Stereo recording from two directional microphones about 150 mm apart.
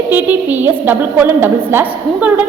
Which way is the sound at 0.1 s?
10° right (ahead or behind).